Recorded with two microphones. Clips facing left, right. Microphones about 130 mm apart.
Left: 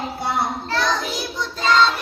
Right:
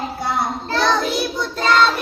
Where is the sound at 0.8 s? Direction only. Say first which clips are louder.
Right 6 dB; 60° right (ahead or behind).